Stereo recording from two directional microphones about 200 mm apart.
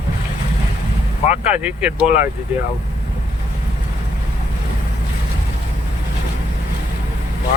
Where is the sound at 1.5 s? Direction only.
5° right (ahead or behind).